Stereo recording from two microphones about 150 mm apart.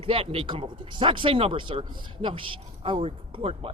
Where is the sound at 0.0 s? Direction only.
40° right (ahead or behind).